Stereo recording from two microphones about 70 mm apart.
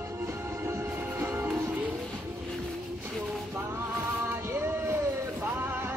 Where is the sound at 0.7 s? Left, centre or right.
Right.